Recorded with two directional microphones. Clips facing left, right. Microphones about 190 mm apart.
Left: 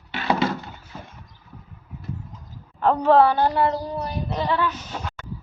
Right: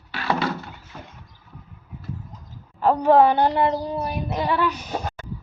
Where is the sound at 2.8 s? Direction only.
10° right (ahead or behind).